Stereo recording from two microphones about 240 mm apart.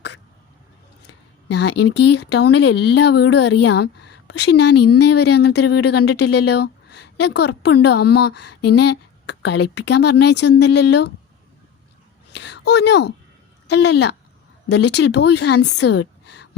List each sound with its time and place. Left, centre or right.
1.5 s a woman's voice: left
12.3 s a sound: left
13.7 s speech: left